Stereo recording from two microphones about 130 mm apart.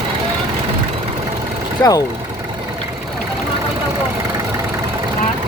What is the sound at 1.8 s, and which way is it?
Speech, 25° left (ahead or behind).